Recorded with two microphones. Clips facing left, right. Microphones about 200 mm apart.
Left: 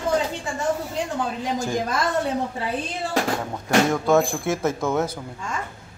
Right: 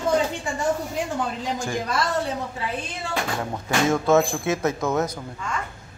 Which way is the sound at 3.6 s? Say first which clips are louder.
Left 1 dB; 5° right (ahead or behind).